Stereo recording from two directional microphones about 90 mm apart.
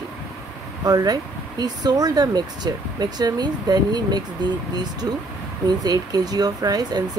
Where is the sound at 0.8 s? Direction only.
45° right (ahead or behind).